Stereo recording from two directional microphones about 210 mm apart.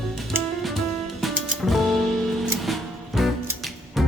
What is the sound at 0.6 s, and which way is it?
Music, centre (ahead or behind).